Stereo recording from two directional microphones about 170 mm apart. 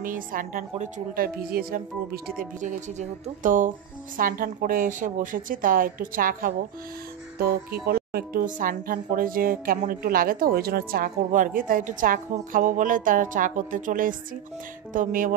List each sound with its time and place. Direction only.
0.0 s a woman's voice: 55° right (ahead or behind)
2.3 s a woman's voice: 50° right (ahead or behind)
7.8 s a woman's voice: 60° right (ahead or behind)